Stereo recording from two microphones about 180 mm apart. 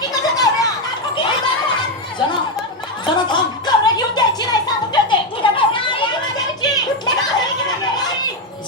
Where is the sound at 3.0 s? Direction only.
25° left (ahead or behind).